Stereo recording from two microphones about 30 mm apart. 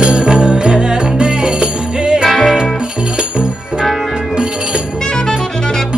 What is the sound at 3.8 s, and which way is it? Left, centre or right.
Music, centre.